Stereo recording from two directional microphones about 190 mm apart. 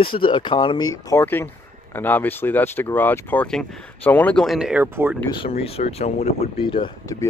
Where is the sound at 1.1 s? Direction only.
15° left (ahead or behind); by 5.2 s 10° right (ahead or behind).